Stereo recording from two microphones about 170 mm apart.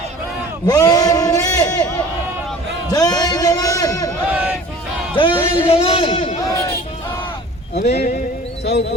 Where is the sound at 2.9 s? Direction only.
25° left (ahead or behind).